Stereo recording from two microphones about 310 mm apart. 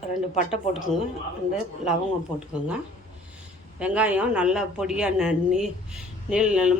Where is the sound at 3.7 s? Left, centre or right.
Centre.